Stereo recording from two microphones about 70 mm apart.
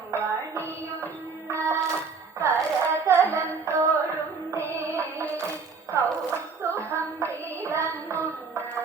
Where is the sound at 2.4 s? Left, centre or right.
Right.